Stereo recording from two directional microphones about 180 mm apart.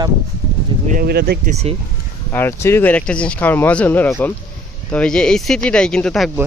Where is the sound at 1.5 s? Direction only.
35° right (ahead or behind).